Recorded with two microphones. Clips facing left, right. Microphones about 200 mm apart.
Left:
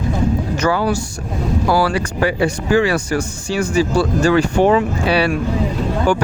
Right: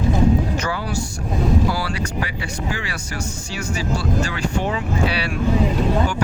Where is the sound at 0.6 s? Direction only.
90° left.